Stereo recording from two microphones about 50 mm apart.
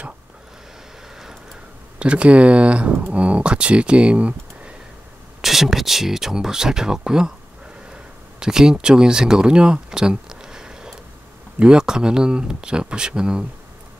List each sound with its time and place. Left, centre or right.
2.0 s speech: right
5.4 s speech: centre
7.9 s a sound: centre
11.6 s speech: centre